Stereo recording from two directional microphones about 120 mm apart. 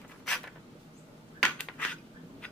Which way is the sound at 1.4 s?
5° left (ahead or behind).